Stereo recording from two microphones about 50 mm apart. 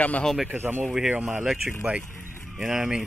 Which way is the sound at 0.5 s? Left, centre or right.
Right.